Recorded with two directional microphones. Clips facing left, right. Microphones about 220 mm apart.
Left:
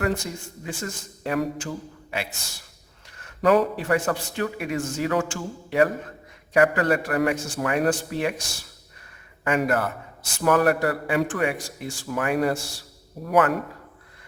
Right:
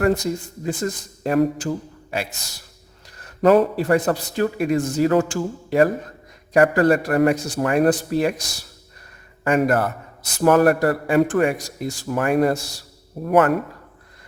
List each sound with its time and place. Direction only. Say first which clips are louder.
0.0 s a man's voice: right 7 dB; 40° right (ahead or behind)